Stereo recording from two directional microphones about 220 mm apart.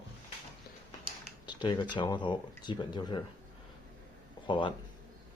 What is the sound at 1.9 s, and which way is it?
Speech, 20° left (ahead or behind).